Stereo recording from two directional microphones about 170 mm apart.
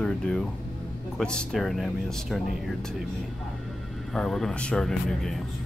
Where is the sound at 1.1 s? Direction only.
5° left (ahead or behind).